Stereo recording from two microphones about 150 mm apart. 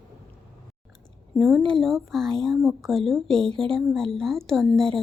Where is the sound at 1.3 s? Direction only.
Centre (ahead or behind).